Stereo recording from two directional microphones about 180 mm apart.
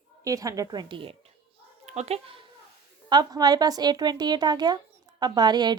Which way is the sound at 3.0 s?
20° right (ahead or behind).